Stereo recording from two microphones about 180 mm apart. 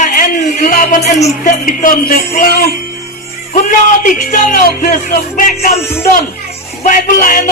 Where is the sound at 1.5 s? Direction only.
50° left (ahead or behind).